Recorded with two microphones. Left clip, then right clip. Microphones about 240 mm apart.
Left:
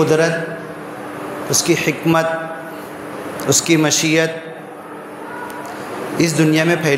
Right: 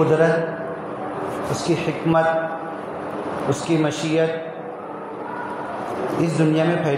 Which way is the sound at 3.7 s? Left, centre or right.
Left.